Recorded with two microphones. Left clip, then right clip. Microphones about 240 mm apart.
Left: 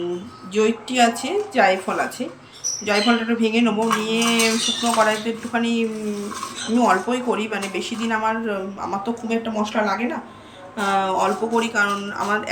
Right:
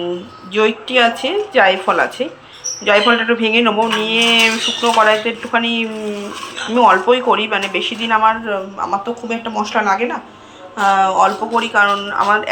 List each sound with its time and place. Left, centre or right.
0.5 s speech: centre